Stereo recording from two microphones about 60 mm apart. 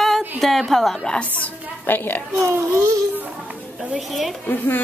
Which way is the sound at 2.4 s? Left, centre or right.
Right.